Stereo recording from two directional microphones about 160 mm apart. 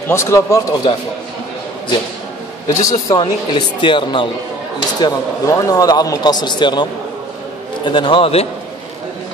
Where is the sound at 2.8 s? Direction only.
20° left (ahead or behind).